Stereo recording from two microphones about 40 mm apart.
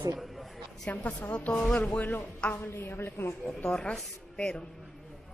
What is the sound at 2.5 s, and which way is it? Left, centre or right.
A woman's voice, left.